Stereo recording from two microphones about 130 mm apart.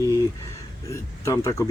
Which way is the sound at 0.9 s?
20° left (ahead or behind).